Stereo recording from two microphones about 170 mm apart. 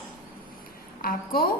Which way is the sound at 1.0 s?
60° left (ahead or behind).